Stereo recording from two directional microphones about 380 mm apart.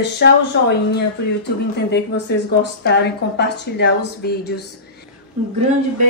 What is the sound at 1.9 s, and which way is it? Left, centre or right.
Speech, left.